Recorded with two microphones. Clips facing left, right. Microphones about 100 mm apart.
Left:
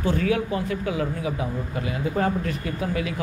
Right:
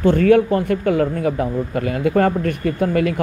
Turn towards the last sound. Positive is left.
turn(degrees=-55)  # may be behind; listen again after turning